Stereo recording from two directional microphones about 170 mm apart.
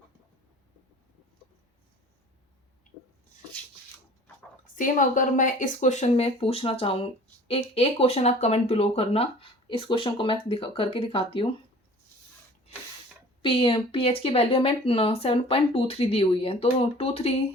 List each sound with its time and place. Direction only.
4.6 s speech: 50° left (ahead or behind); by 11.4 s 35° left (ahead or behind)
13.4 s speech: 30° left (ahead or behind)